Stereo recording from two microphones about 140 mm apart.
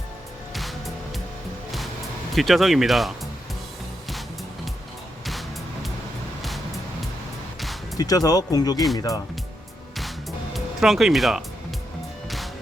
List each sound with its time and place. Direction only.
0.5 s music: centre (ahead or behind)
2.3 s speech: centre (ahead or behind)
7.9 s speech: 25° left (ahead or behind)
10.5 s speech: centre (ahead or behind)